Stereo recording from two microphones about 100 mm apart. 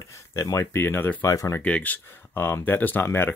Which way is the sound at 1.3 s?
30° left (ahead or behind).